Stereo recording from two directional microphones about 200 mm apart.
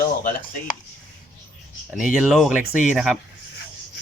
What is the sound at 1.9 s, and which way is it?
Speech, centre (ahead or behind).